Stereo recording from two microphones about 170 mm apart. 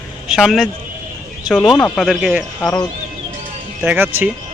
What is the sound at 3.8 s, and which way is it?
Speech, 10° right (ahead or behind).